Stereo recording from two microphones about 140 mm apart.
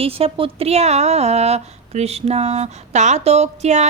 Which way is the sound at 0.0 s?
40° right (ahead or behind).